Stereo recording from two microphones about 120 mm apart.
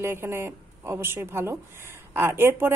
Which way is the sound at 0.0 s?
20° right (ahead or behind).